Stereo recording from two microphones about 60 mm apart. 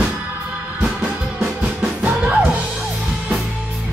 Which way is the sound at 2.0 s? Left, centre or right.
Right.